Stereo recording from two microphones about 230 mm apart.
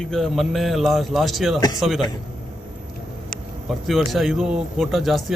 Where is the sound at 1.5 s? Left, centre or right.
Centre.